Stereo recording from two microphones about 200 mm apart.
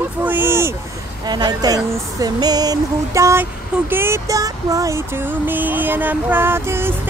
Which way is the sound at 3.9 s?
10° right (ahead or behind).